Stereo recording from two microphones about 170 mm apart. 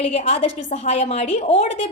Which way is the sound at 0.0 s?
40° left (ahead or behind).